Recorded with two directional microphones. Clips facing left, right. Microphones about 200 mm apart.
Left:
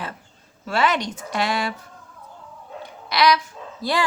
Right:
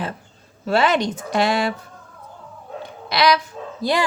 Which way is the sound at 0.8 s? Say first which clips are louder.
Right 2 dB; 25° right (ahead or behind).